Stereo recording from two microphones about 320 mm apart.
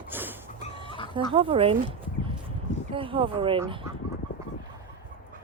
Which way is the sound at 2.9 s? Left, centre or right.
Centre.